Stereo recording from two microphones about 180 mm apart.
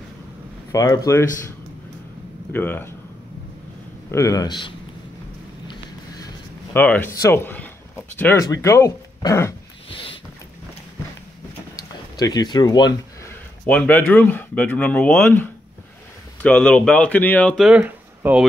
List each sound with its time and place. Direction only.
0.7 s speech: 20° left (ahead or behind)
2.5 s speech: 10° left (ahead or behind)
4.1 s speech: 20° left (ahead or behind)
6.7 s speech: 10° left (ahead or behind)
9.8 s a sound: 30° left (ahead or behind)
11.7 s a sound: 20° left (ahead or behind)
13.7 s speech: 10° left (ahead or behind); by 18.4 s 10° right (ahead or behind)